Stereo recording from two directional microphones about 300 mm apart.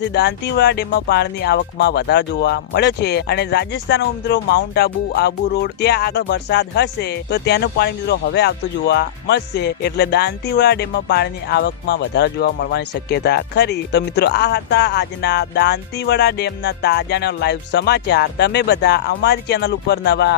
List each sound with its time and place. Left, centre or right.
0.0 s speech: left